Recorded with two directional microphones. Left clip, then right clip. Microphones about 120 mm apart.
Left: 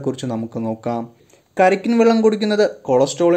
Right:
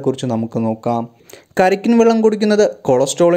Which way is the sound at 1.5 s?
25° right (ahead or behind).